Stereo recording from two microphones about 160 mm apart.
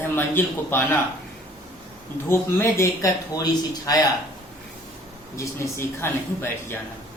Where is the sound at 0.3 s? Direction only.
15° left (ahead or behind).